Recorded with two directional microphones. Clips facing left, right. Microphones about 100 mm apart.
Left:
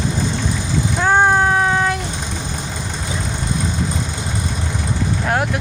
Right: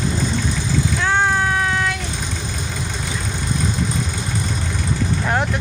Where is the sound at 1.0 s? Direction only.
40° left (ahead or behind).